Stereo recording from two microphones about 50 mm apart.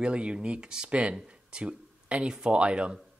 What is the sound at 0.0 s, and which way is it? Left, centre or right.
Speech, right.